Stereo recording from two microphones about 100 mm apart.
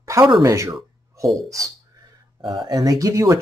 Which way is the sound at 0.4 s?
30° right (ahead or behind).